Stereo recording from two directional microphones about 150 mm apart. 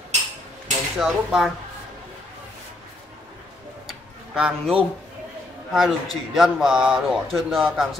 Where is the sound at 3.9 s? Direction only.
5° right (ahead or behind).